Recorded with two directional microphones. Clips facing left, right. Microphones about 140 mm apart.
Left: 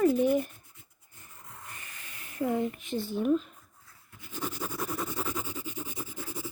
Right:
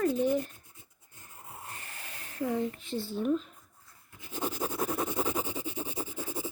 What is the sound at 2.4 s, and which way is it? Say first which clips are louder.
Speech: left 2 dB; 15° left (ahead or behind).